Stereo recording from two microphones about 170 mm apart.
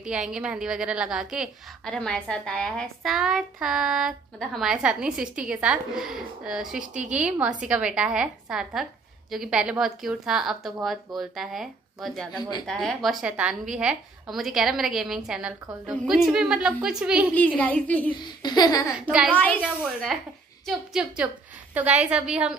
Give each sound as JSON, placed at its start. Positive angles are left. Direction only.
{"t": 0.0, "sound": "a woman's voice", "side_deg": -5}
{"t": 12.3, "sound": "a sound", "side_deg": 25}
{"t": 12.6, "sound": "a woman's voice", "side_deg": 0}
{"t": 17.6, "sound": "a child's voice", "side_deg": 10}
{"t": 18.1, "sound": "a sound", "side_deg": 25}
{"t": 18.9, "sound": "a woman's voice", "side_deg": -5}
{"t": 19.3, "sound": "a child's voice", "side_deg": 10}
{"t": 19.6, "sound": "a woman's voice", "side_deg": -5}